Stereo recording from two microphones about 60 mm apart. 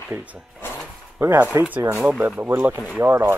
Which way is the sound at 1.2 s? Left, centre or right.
Right.